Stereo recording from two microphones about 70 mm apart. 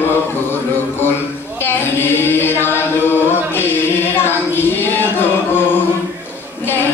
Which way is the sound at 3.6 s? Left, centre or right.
Left.